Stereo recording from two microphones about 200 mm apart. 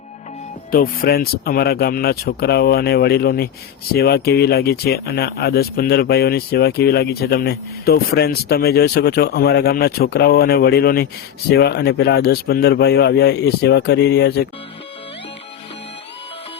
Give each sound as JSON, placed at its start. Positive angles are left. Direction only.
{"t": 0.7, "sound": "speech", "side_deg": 50}